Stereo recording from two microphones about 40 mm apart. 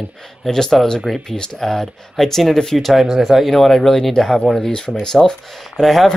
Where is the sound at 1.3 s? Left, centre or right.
Centre.